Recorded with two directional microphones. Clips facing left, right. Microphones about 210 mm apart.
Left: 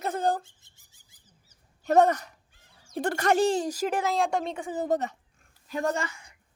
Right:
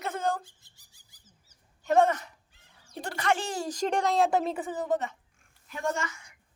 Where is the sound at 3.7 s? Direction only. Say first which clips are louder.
Even; 5° left (ahead or behind).